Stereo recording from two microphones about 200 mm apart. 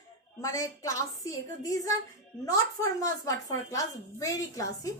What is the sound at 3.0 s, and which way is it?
A woman's voice, 15° left (ahead or behind).